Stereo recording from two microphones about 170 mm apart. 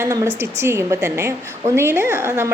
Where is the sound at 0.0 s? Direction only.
20° right (ahead or behind).